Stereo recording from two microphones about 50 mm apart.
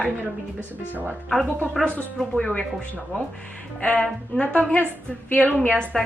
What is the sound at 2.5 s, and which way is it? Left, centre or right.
Speech, left.